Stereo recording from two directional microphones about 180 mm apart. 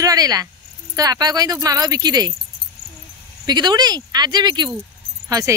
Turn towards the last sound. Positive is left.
turn(degrees=-20)  # may be behind; listen again after turning